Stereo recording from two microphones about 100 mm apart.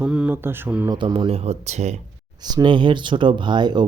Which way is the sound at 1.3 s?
90° right.